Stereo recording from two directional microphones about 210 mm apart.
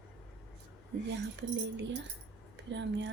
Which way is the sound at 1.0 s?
55° right (ahead or behind).